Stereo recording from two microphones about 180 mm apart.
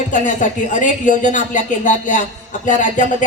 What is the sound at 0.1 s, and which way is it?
Speech, 45° left (ahead or behind).